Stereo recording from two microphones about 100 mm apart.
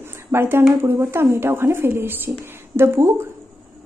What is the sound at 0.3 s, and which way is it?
A woman's voice, 25° right (ahead or behind).